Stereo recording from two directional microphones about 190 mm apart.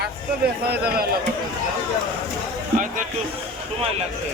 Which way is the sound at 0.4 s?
55° right (ahead or behind).